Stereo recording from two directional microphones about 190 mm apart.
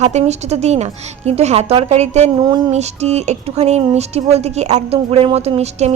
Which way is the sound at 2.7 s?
35° right (ahead or behind).